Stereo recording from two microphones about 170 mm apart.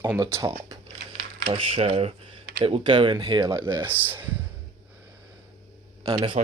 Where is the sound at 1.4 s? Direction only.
35° right (ahead or behind); by 4.3 s 10° right (ahead or behind).